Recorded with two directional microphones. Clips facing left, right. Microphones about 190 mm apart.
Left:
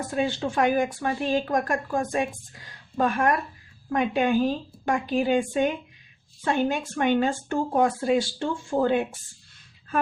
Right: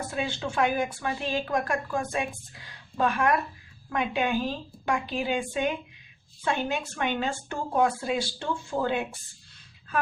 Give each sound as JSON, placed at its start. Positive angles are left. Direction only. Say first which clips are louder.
{"t": 0.1, "sound": "speech", "louder": "left 8 dB", "side_deg": 45}